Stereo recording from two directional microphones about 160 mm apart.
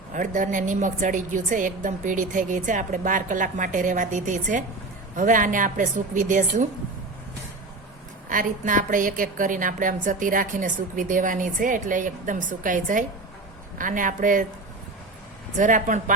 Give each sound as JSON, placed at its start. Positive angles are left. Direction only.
{"t": 0.1, "sound": "a woman's voice", "side_deg": -55}
{"t": 8.3, "sound": "a woman's voice", "side_deg": -55}
{"t": 15.5, "sound": "a woman's voice", "side_deg": -55}